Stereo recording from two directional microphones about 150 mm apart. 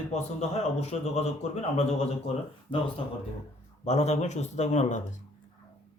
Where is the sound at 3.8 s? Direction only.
45° left (ahead or behind).